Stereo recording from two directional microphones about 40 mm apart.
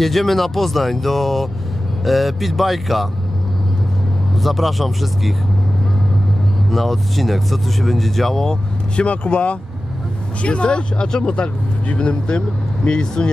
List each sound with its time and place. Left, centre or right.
0.0 s speech: centre
4.4 s speech: centre
6.7 s speech: centre
8.4 s speech: centre
9.0 s speech: left